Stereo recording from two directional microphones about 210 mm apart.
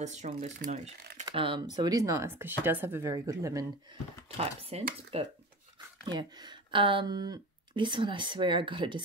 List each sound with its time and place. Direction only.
0.0 s speech: 35° right (ahead or behind); by 3.6 s 15° right (ahead or behind)
4.4 s speech: 30° right (ahead or behind)